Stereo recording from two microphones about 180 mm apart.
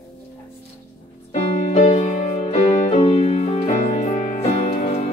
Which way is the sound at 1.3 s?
40° left (ahead or behind).